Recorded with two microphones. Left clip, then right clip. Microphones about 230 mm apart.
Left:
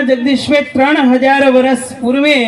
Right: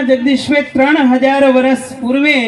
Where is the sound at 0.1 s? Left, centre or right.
Left.